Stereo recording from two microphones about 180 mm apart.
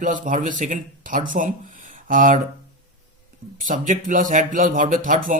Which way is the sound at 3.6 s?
45° right (ahead or behind).